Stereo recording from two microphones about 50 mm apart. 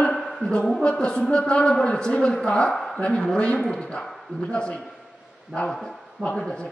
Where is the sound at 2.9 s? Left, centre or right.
Centre.